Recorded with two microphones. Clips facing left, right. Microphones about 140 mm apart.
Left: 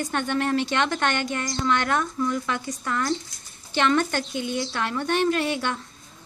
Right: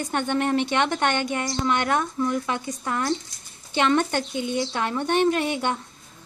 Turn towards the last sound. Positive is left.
turn(degrees=-20)  # may be behind; listen again after turning